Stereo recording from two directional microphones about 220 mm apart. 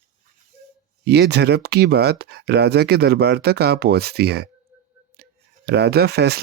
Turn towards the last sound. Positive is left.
turn(degrees=-50)  # may be behind; listen again after turning